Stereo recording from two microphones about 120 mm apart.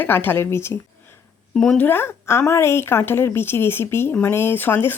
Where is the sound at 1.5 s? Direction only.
5° left (ahead or behind).